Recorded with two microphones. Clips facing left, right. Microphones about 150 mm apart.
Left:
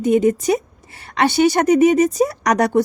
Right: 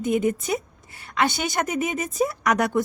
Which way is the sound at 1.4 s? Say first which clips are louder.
Left 12 dB; 35° left (ahead or behind).